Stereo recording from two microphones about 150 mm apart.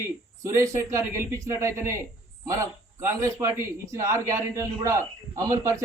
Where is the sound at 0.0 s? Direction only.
20° right (ahead or behind).